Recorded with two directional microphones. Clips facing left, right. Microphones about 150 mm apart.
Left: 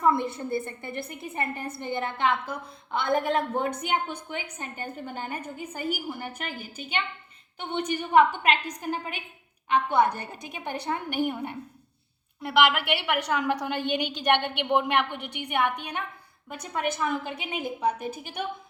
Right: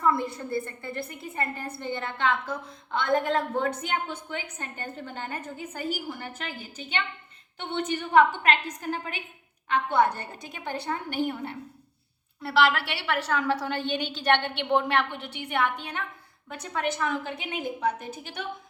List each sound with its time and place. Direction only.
0.0 s a woman's voice: 20° left (ahead or behind)